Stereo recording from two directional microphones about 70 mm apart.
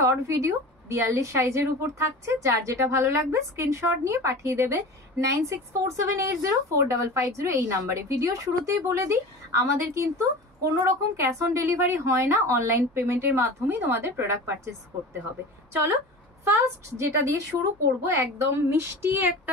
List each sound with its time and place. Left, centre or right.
0.0 s a woman's voice: right
15.7 s a woman's voice: right